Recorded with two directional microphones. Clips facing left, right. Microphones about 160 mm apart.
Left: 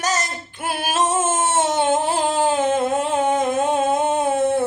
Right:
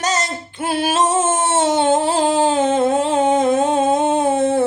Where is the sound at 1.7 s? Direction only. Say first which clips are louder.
Right 3 dB; 20° right (ahead or behind).